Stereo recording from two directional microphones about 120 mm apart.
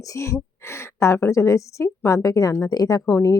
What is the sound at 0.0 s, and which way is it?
Speech, 25° left (ahead or behind).